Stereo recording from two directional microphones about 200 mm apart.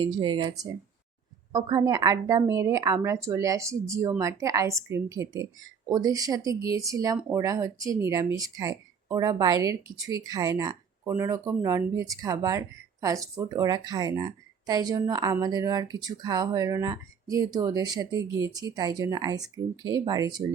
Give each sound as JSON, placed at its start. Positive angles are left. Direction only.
{"t": 0.0, "sound": "speech", "side_deg": -25}